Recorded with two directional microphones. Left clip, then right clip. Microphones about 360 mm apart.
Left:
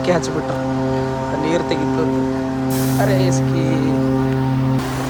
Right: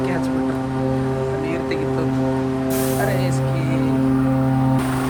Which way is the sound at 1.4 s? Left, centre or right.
Centre.